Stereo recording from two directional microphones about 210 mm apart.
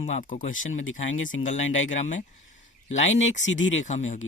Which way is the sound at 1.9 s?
35° left (ahead or behind).